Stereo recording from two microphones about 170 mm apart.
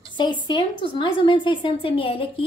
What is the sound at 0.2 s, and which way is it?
A woman's voice, 25° left (ahead or behind).